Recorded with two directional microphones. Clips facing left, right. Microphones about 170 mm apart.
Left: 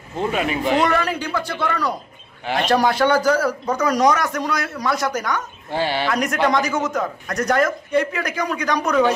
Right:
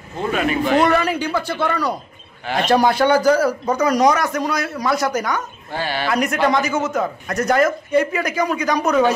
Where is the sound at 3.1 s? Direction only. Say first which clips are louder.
Right 3 dB; 20° right (ahead or behind).